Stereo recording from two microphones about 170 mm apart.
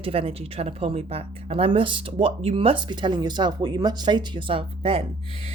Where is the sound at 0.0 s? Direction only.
35° right (ahead or behind).